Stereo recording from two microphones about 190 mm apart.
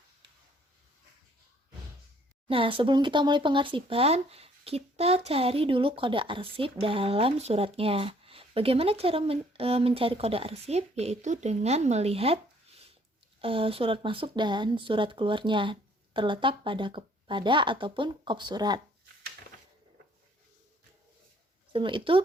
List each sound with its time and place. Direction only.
2.5 s speech: 30° right (ahead or behind)
21.7 s speech: 25° right (ahead or behind)